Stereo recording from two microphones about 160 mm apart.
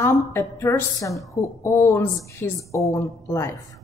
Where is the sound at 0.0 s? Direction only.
15° left (ahead or behind).